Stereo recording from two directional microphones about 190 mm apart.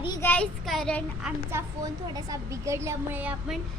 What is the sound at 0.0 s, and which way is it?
Speech, 20° left (ahead or behind).